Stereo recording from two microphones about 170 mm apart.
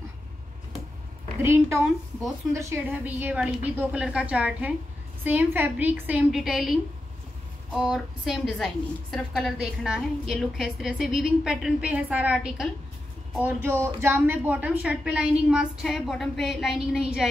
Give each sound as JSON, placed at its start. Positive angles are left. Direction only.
{"t": 1.4, "sound": "a woman's voice", "side_deg": -15}